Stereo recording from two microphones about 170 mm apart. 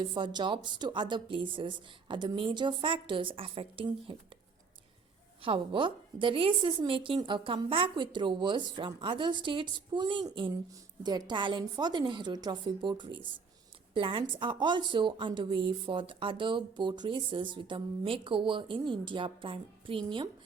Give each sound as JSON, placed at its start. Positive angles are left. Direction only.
{"t": 0.0, "sound": "a woman's voice", "side_deg": -30}
{"t": 5.4, "sound": "a woman's voice", "side_deg": -30}